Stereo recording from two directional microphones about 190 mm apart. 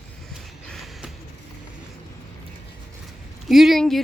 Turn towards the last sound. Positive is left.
turn(degrees=0)  # may be behind; listen again after turning